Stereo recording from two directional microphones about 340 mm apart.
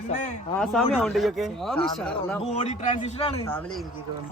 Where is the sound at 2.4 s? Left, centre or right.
Centre.